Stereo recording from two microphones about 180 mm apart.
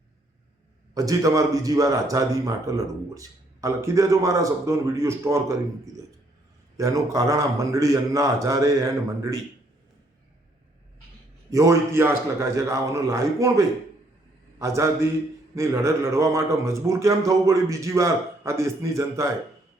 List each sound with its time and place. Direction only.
0.9 s speech: 20° right (ahead or behind)
6.7 s a man's voice: 20° right (ahead or behind)
11.5 s a man's voice: 15° right (ahead or behind)